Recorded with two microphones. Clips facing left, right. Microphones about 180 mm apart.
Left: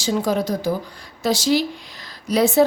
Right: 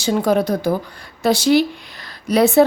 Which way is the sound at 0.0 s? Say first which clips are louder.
Right 4 dB; 60° right (ahead or behind).